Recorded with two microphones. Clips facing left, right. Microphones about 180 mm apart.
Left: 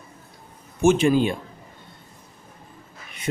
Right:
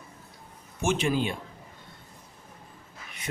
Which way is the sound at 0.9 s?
45° left (ahead or behind).